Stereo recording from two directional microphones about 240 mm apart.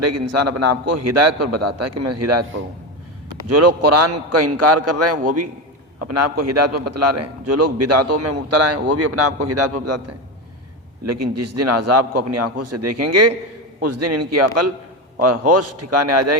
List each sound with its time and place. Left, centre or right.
0.0 s a man's voice: right
3.5 s a man's voice: right
6.1 s a man's voice: right
11.0 s a man's voice: right